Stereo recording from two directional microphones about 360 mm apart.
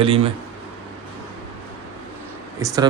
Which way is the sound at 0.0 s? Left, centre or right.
Centre.